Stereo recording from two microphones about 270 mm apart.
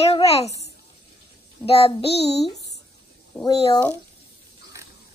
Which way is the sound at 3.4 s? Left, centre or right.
Centre.